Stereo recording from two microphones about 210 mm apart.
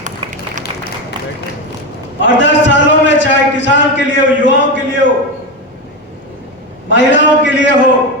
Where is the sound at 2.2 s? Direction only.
60° left (ahead or behind).